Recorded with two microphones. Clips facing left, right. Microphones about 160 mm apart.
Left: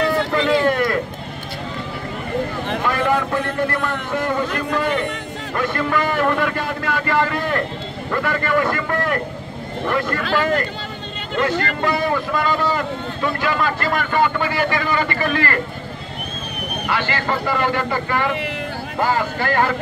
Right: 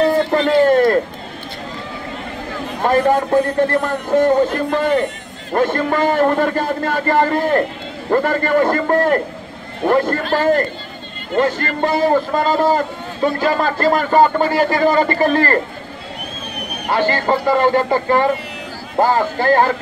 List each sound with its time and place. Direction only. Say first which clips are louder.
0.0 s a sound: right 4 dB; 40° right (ahead or behind)
2.8 s a man's voice: right 6 dB; 40° right (ahead or behind)
16.8 s a man's voice: right 6 dB; 40° right (ahead or behind)